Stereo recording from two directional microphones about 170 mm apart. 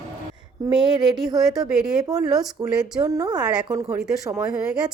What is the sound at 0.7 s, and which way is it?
A woman's voice, 5° right (ahead or behind).